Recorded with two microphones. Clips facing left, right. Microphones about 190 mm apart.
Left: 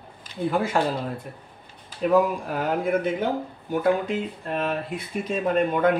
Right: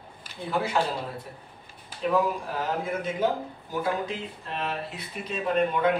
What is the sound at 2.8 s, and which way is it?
Speech, 60° left (ahead or behind).